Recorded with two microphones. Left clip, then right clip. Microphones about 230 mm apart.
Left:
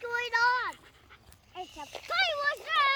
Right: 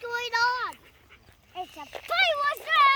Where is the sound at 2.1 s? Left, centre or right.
Right.